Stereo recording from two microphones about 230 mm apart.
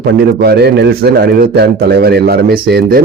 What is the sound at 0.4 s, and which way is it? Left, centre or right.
A man's voice, right.